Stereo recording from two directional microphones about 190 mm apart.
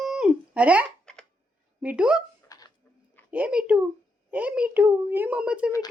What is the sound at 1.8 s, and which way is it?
Speech, 5° right (ahead or behind).